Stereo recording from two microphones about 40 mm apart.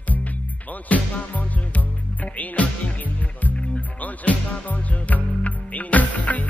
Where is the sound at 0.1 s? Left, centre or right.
Left.